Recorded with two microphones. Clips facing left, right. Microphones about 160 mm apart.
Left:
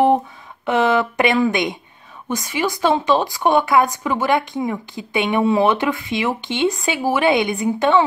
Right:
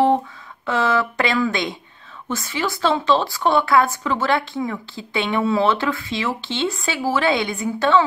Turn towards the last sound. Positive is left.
turn(degrees=15)  # may be behind; listen again after turning